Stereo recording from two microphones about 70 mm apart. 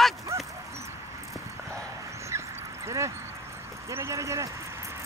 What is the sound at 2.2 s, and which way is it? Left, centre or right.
Dog, right.